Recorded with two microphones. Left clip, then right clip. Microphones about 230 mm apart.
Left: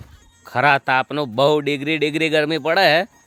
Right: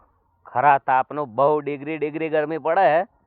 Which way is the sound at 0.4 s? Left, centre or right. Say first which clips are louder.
Left 1 dB; centre.